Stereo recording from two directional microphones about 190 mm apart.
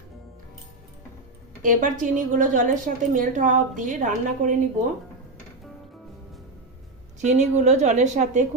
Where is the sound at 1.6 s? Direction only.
45° right (ahead or behind).